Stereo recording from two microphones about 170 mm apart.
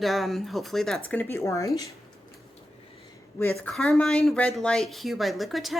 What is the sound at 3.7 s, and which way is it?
A woman's voice, centre (ahead or behind).